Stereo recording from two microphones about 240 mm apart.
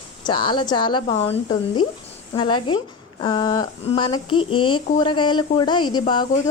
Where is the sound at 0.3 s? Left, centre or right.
Centre.